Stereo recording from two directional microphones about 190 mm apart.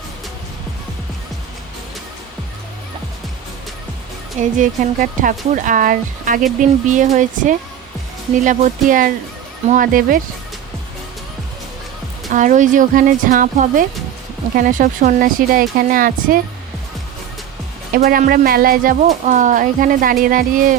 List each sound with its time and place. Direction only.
4.4 s speech: 40° right (ahead or behind)
12.3 s speech: 40° right (ahead or behind)
17.9 s speech: 50° right (ahead or behind)